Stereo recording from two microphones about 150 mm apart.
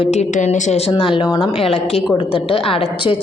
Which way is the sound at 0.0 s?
45° left (ahead or behind).